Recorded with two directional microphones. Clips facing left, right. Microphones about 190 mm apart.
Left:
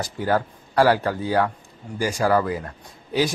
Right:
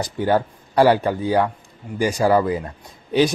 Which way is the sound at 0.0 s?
20° right (ahead or behind).